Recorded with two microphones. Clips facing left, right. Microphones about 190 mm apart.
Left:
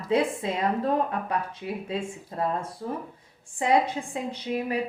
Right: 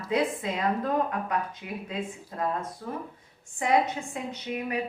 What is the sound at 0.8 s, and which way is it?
Speech, 30° left (ahead or behind).